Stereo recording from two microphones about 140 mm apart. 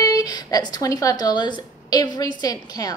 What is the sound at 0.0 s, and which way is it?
A woman's voice, 25° left (ahead or behind).